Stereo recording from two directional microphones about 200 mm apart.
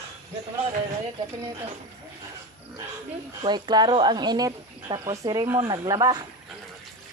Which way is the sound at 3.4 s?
20° right (ahead or behind).